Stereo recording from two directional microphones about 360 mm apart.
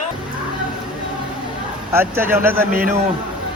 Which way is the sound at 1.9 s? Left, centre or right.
Centre.